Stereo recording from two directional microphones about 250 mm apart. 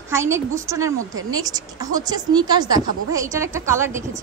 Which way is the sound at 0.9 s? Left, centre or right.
Right.